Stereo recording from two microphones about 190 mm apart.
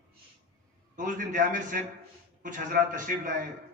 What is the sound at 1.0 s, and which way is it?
A man's voice, 45° right (ahead or behind).